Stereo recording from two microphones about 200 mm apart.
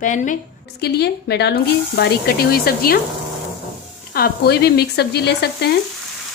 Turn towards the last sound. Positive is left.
turn(degrees=55)  # may be behind; listen again after turning